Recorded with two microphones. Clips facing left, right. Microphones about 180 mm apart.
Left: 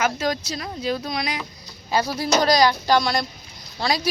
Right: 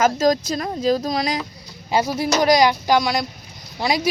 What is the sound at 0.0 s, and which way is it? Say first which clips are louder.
Speech: right 6 dB; 40° right (ahead or behind).